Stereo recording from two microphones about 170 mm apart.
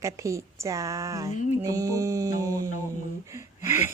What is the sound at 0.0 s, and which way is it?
A woman's voice, 20° right (ahead or behind).